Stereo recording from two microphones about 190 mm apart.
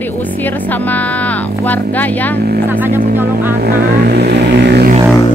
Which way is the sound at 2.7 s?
10° right (ahead or behind).